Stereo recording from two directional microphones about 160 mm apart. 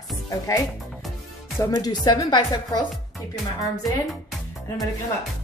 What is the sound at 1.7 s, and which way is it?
Speech, 25° left (ahead or behind).